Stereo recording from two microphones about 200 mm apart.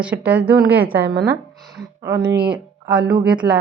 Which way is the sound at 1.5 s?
Centre (ahead or behind).